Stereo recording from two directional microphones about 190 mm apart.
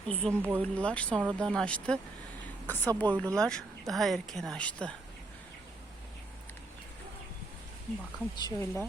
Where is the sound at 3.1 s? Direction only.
5° left (ahead or behind).